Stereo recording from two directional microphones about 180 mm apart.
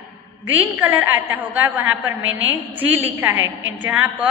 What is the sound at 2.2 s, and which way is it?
Speech, 90° right.